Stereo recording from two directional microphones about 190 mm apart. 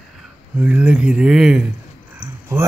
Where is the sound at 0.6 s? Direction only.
5° right (ahead or behind).